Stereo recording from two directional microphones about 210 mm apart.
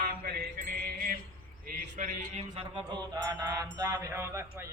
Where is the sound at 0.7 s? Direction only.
45° right (ahead or behind).